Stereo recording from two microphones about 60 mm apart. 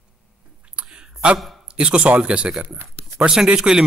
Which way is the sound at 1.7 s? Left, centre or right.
Centre.